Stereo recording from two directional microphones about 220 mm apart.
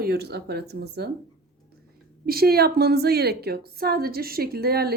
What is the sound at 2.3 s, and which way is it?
A woman's voice, 45° right (ahead or behind).